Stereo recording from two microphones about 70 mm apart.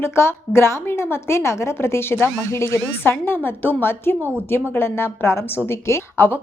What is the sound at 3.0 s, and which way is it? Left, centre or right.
A woman's voice, left.